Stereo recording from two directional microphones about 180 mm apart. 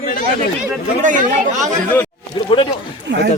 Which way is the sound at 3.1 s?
85° right.